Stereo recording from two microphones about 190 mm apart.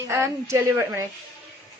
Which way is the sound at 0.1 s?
15° right (ahead or behind).